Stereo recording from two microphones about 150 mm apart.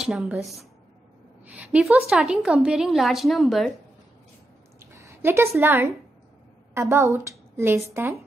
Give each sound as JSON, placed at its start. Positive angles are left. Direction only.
{"t": 0.0, "sound": "a woman's voice", "side_deg": -5}
{"t": 1.4, "sound": "a woman's voice", "side_deg": -10}
{"t": 4.7, "sound": "a sound", "side_deg": -20}
{"t": 5.6, "sound": "a woman's voice", "side_deg": -15}